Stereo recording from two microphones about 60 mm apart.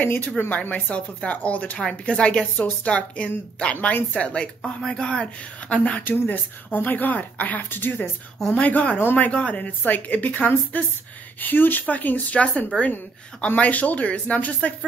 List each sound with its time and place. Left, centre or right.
0.0 s a woman's voice: left; by 3.7 s centre
3.7 s speech: left
4.1 s a woman's voice: centre
6.0 s a woman's voice: left
8.5 s a woman's voice: left